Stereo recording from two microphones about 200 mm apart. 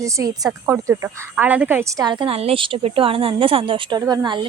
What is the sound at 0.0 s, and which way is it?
Speech, 15° right (ahead or behind).